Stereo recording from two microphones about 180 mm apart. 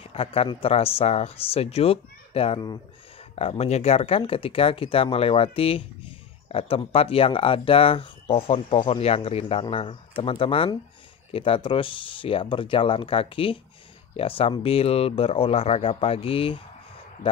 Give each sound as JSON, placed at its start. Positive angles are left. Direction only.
{"t": 0.0, "sound": "speech", "side_deg": 30}